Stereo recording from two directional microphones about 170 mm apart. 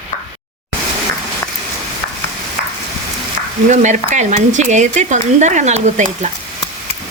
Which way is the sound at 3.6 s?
45° right (ahead or behind).